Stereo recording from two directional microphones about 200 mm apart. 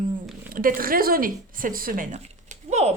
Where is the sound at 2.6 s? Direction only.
35° right (ahead or behind).